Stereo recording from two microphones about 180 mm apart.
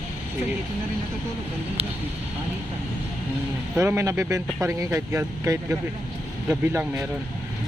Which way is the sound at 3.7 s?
15° right (ahead or behind).